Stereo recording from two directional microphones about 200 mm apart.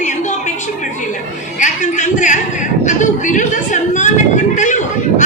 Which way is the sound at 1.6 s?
35° left (ahead or behind).